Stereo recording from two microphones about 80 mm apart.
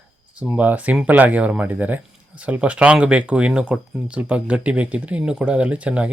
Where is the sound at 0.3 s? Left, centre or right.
Centre.